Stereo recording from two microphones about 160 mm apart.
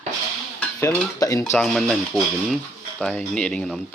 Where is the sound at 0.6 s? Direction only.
10° left (ahead or behind).